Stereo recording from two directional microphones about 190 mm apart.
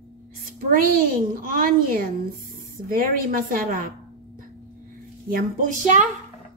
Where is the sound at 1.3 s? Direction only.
50° right (ahead or behind).